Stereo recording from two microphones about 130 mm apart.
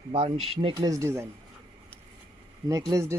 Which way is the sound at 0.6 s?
35° right (ahead or behind).